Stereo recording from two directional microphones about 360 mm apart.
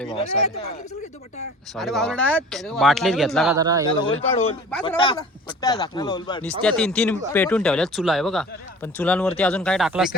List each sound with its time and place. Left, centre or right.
0.1 s speech: centre
1.7 s speech: centre
4.0 s speech: centre